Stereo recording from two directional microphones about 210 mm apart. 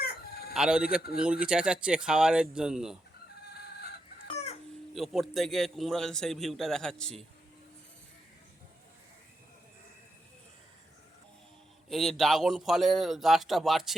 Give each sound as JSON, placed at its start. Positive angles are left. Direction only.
{"t": 0.0, "sound": "chicken", "side_deg": 50}
{"t": 0.5, "sound": "a man's voice", "side_deg": -5}
{"t": 4.9, "sound": "a man's voice", "side_deg": 0}
{"t": 11.9, "sound": "a man's voice", "side_deg": 0}